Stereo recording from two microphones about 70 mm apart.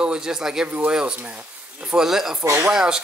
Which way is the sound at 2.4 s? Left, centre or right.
Right.